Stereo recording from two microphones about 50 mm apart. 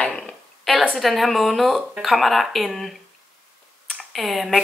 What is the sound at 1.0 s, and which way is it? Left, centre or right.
Speech, centre.